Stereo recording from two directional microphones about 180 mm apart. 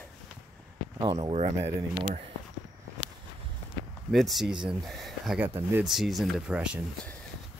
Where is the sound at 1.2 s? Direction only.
40° right (ahead or behind).